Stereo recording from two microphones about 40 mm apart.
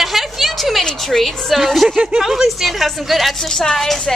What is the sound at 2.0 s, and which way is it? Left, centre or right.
Speech, right.